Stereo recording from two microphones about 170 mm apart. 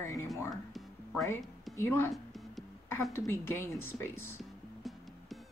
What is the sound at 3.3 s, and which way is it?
Speech, 15° left (ahead or behind).